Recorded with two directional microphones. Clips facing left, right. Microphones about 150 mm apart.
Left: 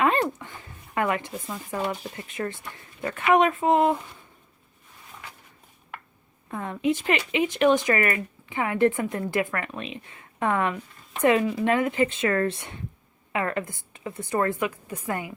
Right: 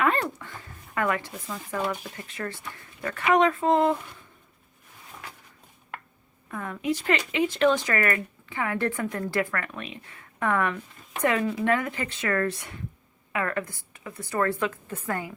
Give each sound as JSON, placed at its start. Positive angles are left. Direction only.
{"t": 0.0, "sound": "dog", "side_deg": 20}
{"t": 0.9, "sound": "speech", "side_deg": 20}
{"t": 6.5, "sound": "speech", "side_deg": 25}